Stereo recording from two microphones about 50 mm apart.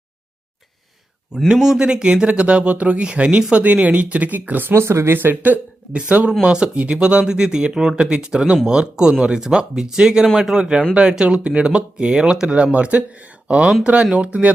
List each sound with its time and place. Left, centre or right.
1.5 s speech: centre; by 4.7 s right
4.7 s speech: right
5.4 s speech: right